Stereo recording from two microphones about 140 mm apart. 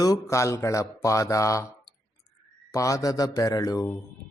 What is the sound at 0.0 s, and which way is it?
A man's voice, 25° left (ahead or behind).